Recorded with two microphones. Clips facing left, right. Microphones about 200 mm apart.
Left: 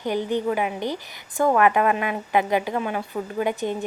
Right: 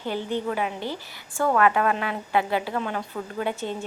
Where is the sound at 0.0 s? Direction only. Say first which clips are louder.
Left 4 dB; 15° left (ahead or behind).